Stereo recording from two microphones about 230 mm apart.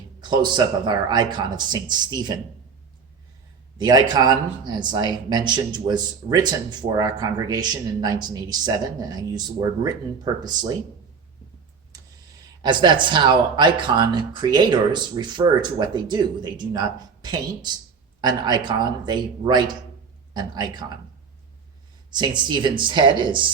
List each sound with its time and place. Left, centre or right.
0.2 s speech: centre
3.8 s speech: centre
12.6 s speech: centre
22.1 s speech: centre